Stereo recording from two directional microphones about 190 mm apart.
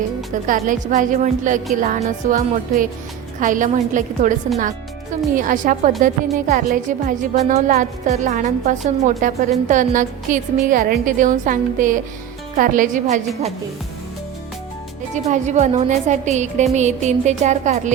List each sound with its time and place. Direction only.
0.4 s a woman's voice: 45° right (ahead or behind)
15.1 s a woman's voice: 40° right (ahead or behind)